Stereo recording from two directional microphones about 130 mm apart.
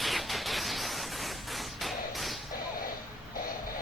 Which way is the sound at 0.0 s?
Centre (ahead or behind).